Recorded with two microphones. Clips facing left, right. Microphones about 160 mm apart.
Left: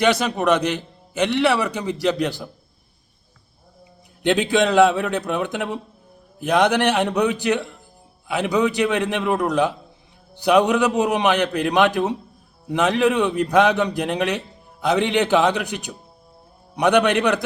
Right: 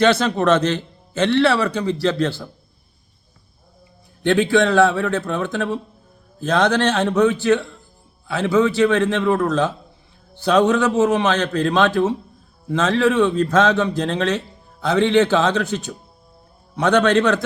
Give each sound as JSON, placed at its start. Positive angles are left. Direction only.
{"t": 0.0, "sound": "a man's voice", "side_deg": 15}
{"t": 4.2, "sound": "a man's voice", "side_deg": 15}